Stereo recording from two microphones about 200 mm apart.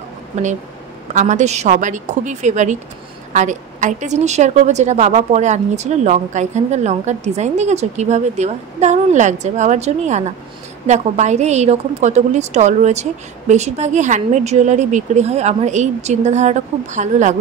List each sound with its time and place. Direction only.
1.1 s a woman's voice: 35° right (ahead or behind)